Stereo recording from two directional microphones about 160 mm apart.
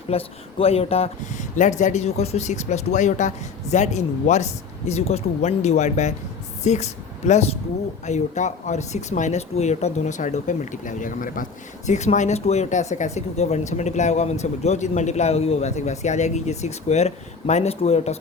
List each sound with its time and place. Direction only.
0.1 s speech: 40° left (ahead or behind)